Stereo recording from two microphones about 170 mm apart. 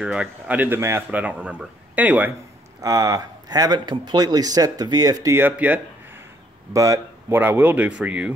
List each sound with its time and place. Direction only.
0.0 s speech: 5° right (ahead or behind)
2.8 s speech: 20° right (ahead or behind)